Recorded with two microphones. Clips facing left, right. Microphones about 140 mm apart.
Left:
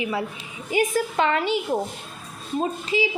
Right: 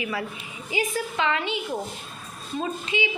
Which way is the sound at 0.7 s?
45° left (ahead or behind).